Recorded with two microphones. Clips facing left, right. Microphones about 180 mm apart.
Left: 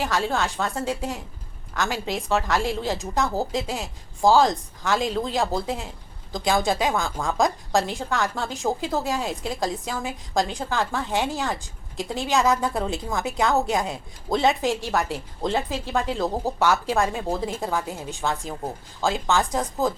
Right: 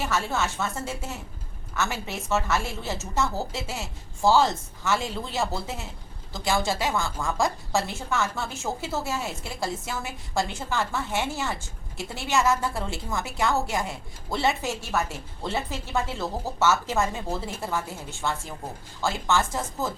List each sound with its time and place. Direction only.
0.0 s a woman's voice: 15° left (ahead or behind)